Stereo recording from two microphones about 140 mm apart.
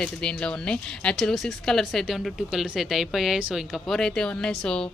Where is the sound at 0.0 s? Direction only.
5° left (ahead or behind).